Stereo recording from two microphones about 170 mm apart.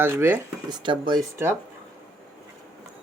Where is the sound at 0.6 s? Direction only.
25° right (ahead or behind).